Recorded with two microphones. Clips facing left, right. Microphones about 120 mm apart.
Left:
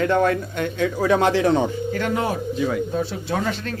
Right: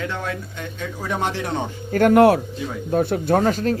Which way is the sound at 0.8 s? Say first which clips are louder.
Left 7 dB; 90° left.